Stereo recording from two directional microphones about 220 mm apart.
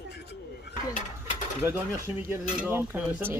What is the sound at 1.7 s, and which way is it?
Cutlery, 10° right (ahead or behind).